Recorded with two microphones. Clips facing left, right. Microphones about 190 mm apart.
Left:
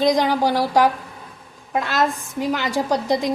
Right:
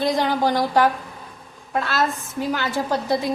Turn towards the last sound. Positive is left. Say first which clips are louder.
# left 2 dB
turn(degrees=15)  # may be behind; listen again after turning